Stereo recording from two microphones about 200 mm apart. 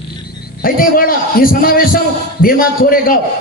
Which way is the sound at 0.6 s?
45° left (ahead or behind).